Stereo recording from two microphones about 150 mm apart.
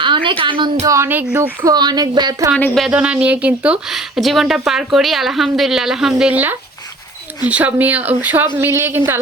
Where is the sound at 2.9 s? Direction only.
10° right (ahead or behind).